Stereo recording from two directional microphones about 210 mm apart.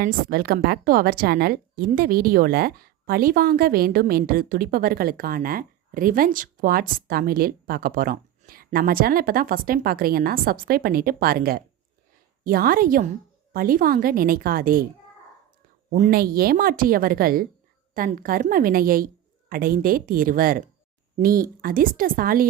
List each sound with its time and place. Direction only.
0.0 s a woman's voice: 45° right (ahead or behind)
15.9 s a woman's voice: 45° right (ahead or behind)